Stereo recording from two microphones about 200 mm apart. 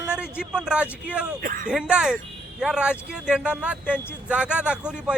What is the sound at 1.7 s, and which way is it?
Speech, 5° right (ahead or behind).